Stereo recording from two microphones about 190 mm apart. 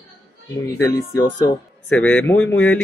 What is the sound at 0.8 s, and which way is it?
Speech, 15° left (ahead or behind).